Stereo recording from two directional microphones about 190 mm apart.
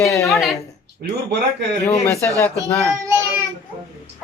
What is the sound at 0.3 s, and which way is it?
Speech, centre (ahead or behind).